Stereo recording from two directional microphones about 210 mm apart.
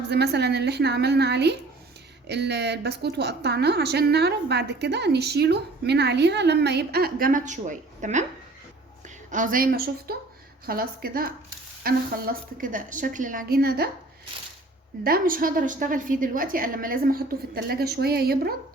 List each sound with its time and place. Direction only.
0.1 s a woman's voice: 50° right (ahead or behind)
15.0 s a woman's voice: 45° right (ahead or behind)